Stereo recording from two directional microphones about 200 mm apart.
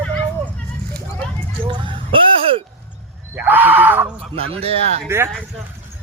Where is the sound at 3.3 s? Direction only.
10° right (ahead or behind).